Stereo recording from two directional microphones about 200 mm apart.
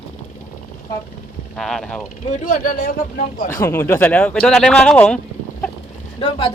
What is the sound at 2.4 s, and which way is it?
A man's voice, 45° left (ahead or behind).